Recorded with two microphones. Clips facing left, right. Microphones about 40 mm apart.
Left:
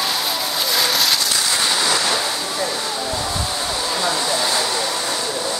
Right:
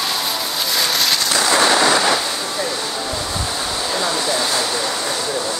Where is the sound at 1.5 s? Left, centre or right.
Right.